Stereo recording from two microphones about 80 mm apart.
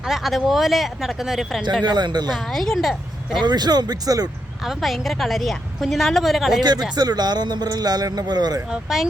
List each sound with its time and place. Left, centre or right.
0.0 s a woman's voice: centre
1.8 s a man's voice: right
2.3 s a woman's voice: centre
3.4 s a man's voice: right
4.6 s a woman's voice: centre
6.9 s a man's voice: right
8.7 s a woman's voice: centre